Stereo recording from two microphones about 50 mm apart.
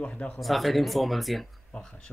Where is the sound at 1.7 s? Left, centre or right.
Centre.